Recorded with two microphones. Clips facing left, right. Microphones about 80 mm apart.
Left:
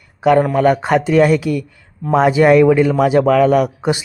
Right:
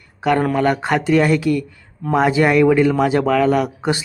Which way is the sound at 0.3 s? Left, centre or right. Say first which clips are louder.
Left 2 dB; centre.